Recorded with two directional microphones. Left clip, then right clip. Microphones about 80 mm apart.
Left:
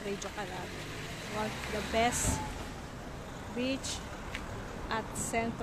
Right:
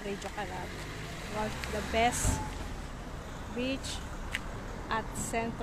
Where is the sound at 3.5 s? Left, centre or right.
Centre.